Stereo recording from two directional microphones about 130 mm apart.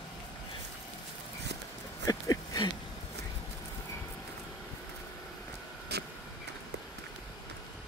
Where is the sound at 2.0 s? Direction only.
25° left (ahead or behind).